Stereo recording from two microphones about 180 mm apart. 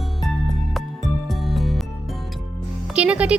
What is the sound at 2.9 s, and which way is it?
Music, 5° right (ahead or behind).